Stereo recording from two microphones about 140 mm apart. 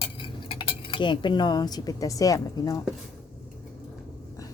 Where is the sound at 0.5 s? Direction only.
35° left (ahead or behind).